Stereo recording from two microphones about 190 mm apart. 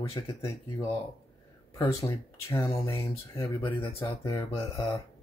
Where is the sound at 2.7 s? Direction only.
25° left (ahead or behind).